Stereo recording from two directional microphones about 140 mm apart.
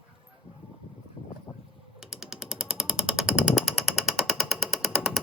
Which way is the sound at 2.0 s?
5° right (ahead or behind).